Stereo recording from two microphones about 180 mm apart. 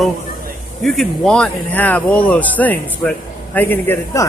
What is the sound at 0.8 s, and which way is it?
Speech, centre (ahead or behind).